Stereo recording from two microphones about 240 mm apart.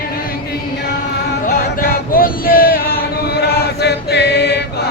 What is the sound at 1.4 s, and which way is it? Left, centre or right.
Male singing, left.